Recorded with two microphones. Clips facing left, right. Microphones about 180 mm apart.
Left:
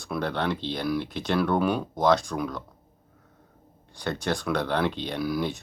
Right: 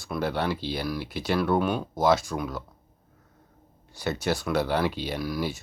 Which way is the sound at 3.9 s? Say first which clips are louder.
Right 1 dB; 5° right (ahead or behind).